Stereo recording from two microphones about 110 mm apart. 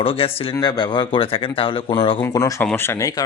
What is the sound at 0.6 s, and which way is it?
Speech, 40° left (ahead or behind).